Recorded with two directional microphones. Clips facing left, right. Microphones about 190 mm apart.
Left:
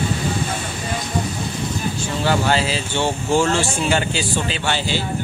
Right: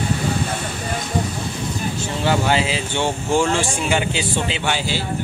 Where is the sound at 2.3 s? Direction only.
15° right (ahead or behind).